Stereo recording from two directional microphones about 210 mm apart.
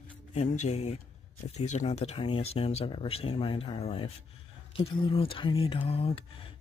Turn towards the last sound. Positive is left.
turn(degrees=25)  # may be behind; listen again after turning